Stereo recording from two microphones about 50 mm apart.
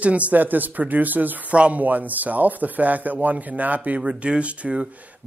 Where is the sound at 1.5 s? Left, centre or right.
Right.